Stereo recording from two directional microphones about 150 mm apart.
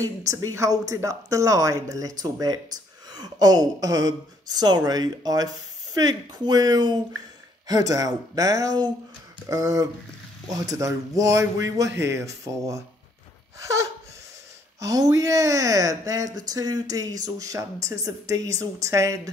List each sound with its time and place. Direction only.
0.3 s a woman's voice: 20° right (ahead or behind)